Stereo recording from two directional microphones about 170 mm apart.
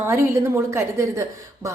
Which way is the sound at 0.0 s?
15° right (ahead or behind).